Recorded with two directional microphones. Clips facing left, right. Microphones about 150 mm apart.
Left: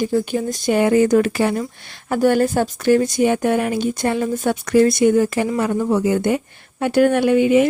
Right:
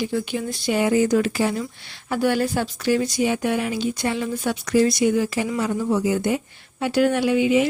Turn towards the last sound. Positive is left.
turn(degrees=50)  # may be behind; listen again after turning